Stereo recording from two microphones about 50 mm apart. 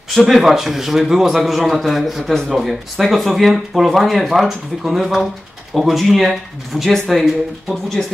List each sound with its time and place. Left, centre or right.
0.1 s speech: centre
8.0 s speech: centre